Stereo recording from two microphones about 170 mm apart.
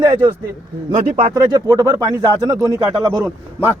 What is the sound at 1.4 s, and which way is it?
Speech, 25° right (ahead or behind).